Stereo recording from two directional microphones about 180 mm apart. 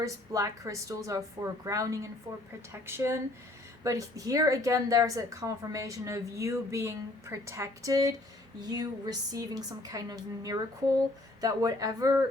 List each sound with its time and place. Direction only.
0.0 s a woman's voice: 20° right (ahead or behind)